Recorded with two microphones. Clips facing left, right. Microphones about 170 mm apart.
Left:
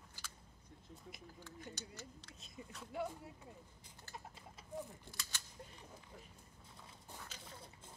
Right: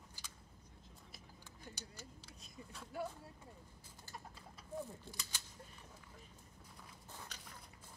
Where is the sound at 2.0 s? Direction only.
10° right (ahead or behind).